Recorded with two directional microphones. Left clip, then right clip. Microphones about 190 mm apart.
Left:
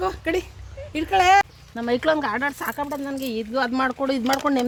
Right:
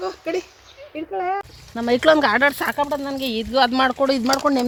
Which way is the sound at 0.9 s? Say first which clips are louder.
Left 8 dB; 35° left (ahead or behind).